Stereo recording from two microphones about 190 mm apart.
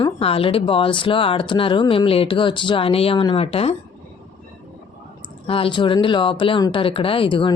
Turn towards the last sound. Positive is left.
turn(degrees=25)  # may be behind; listen again after turning